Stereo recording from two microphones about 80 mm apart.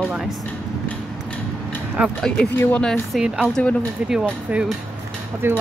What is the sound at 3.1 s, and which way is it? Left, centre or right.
Speech, centre.